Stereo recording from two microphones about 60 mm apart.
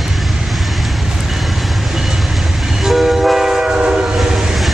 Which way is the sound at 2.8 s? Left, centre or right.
Centre.